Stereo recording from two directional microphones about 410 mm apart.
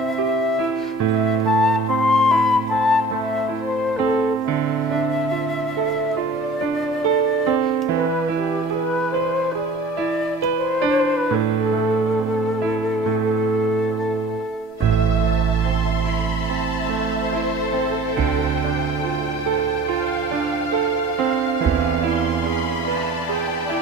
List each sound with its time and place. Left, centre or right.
1.5 s flute: right
2.1 s flute: centre